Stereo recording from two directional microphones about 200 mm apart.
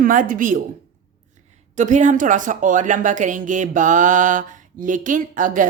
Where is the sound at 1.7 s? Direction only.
35° right (ahead or behind).